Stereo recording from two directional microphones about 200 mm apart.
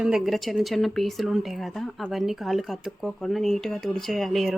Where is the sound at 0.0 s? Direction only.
Centre (ahead or behind).